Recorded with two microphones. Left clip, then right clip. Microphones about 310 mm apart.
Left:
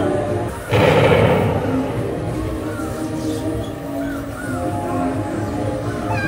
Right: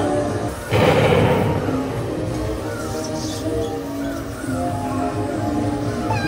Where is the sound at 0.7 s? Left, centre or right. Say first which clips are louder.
Left 2 dB; centre.